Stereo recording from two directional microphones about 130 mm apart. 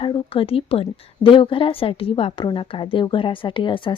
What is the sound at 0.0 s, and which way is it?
A woman's voice, 40° left (ahead or behind).